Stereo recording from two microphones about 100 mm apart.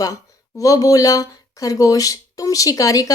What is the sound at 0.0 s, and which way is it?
Speech, 35° left (ahead or behind).